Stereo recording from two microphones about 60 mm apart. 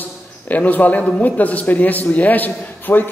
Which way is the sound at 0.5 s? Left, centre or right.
Left.